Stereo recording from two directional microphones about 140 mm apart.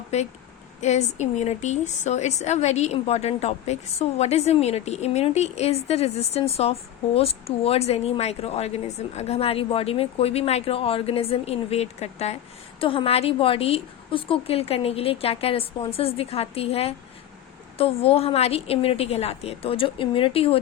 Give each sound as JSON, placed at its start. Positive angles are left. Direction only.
{"t": 0.1, "sound": "a woman's voice", "side_deg": 50}